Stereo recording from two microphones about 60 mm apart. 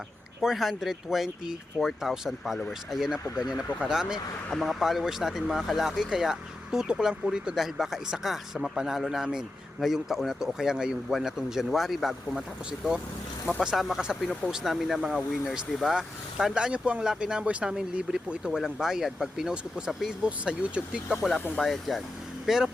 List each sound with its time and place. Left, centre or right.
0.4 s speech: centre
4.5 s speech: centre
13.6 s speech: centre
21.6 s speech: centre